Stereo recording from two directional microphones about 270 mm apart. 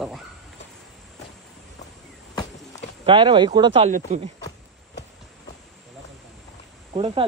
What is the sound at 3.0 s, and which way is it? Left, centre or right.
Speech, centre.